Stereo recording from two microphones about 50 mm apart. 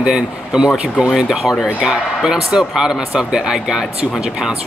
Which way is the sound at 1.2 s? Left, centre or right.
Centre.